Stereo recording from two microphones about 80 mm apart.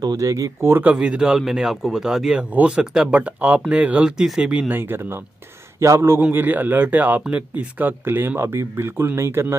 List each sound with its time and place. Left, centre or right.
0.0 s speech: right
0.7 s speech: right
0.9 s speech: centre
4.6 s speech: right
5.8 s a man's voice: right
6.2 s speech: right